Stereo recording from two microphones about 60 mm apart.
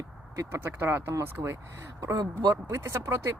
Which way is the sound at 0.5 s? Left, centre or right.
Right.